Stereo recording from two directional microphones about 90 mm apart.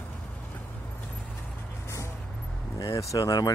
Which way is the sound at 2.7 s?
35° left (ahead or behind).